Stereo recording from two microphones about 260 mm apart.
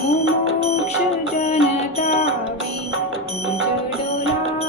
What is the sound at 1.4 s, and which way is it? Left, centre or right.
Music, left.